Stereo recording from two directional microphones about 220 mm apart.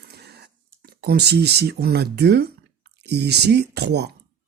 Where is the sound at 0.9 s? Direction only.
45° right (ahead or behind).